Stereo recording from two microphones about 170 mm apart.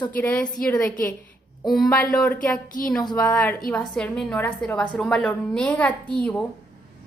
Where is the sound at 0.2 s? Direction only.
10° left (ahead or behind).